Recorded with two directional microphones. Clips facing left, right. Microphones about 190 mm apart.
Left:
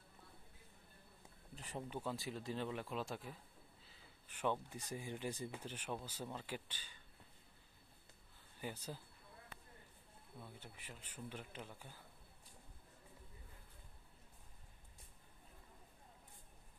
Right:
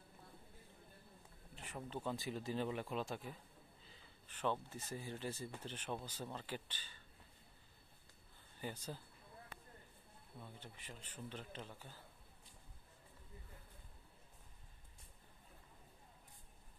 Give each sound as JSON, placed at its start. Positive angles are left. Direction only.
{"t": 1.5, "sound": "a sound", "side_deg": 35}
{"t": 1.8, "sound": "speech", "side_deg": 15}
{"t": 2.0, "sound": "speech", "side_deg": 0}
{"t": 8.5, "sound": "speech", "side_deg": 10}
{"t": 10.4, "sound": "speech", "side_deg": 10}